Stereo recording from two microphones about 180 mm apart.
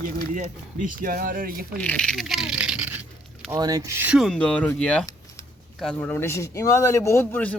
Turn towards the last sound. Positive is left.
turn(degrees=10)  # may be behind; listen again after turning